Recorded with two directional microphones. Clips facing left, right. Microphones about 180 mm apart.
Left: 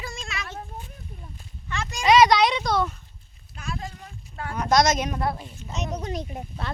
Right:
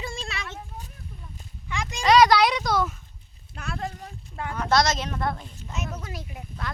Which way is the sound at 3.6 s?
60° right (ahead or behind).